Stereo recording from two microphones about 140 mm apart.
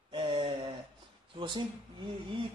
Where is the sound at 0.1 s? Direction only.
40° right (ahead or behind).